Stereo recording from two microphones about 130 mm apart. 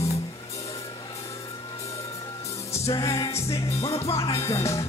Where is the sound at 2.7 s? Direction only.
25° left (ahead or behind).